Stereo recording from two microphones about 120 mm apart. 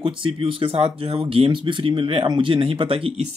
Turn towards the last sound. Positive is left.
turn(degrees=-50)  # may be behind; listen again after turning